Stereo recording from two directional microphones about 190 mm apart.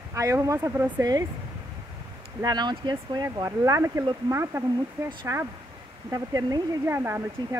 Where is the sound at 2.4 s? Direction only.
20° right (ahead or behind).